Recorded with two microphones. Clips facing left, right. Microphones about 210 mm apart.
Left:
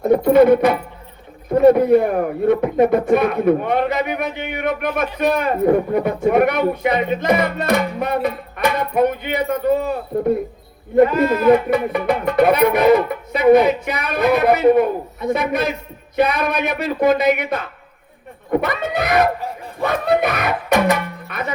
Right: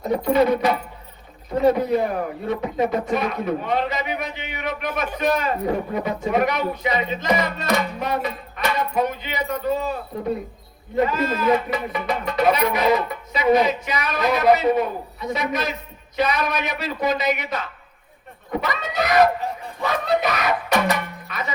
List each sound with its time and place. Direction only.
0.0 s speech: 55° left (ahead or behind)